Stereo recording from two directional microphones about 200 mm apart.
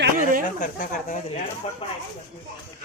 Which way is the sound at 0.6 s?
40° left (ahead or behind).